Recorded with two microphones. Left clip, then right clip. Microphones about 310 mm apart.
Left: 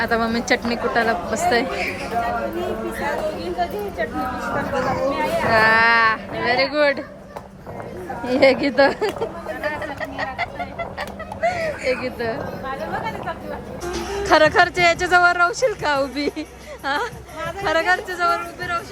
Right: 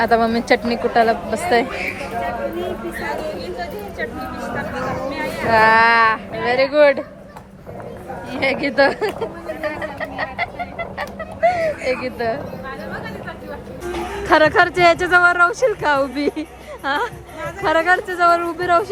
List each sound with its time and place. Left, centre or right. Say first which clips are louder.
0.0 s speech: right 5 dB; centre
3.4 s speech: left 3 dB; left
4.7 s chatter: left 3 dB; left
5.5 s speech: right 3 dB; centre
8.4 s a sound: left 1 dB; centre
14.3 s speech: right 1 dB; centre